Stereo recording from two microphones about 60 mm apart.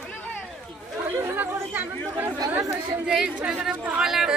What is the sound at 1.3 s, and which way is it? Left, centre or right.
Chatter, right.